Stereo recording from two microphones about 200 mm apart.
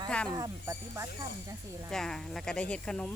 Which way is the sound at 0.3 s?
15° right (ahead or behind).